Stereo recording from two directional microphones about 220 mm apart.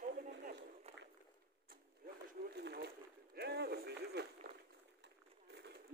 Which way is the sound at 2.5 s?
50° right (ahead or behind).